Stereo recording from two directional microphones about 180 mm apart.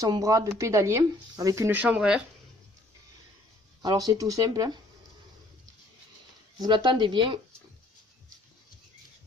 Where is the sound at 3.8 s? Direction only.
20° right (ahead or behind).